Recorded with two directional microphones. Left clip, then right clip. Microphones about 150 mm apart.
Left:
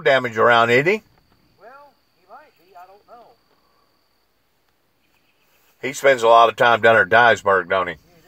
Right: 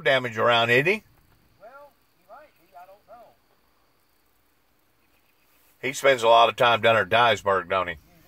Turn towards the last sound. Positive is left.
turn(degrees=25)  # may be behind; listen again after turning